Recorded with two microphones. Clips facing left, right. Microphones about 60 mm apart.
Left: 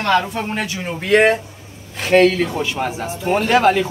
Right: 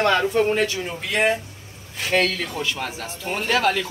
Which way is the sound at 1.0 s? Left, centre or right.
Left.